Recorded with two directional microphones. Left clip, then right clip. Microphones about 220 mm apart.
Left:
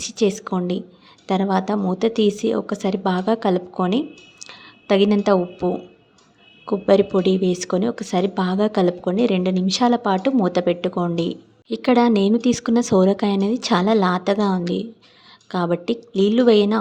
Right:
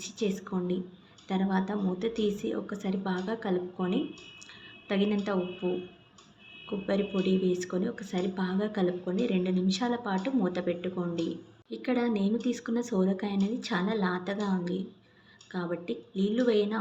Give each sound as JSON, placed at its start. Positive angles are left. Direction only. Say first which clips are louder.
{"t": 0.0, "sound": "a woman's voice", "louder": "left 12 dB", "side_deg": 50}
{"t": 4.4, "sound": "a sound", "louder": "left 14 dB", "side_deg": 50}
{"t": 6.7, "sound": "a woman's voice", "louder": "left 15 dB", "side_deg": 50}